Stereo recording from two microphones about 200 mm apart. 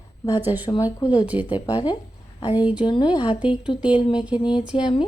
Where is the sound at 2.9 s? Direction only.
25° left (ahead or behind).